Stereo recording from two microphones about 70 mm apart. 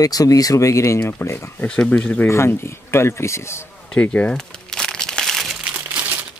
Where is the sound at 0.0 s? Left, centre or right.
Left.